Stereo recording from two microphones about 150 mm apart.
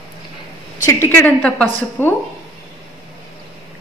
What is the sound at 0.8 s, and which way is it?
A woman's voice, 15° left (ahead or behind).